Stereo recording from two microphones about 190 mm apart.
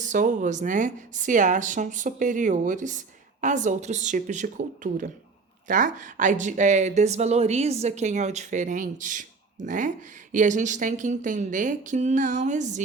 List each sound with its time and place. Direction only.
0.0 s speech: 40° right (ahead or behind)